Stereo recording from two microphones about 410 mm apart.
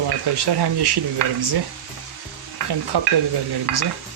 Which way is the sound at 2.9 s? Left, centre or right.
Right.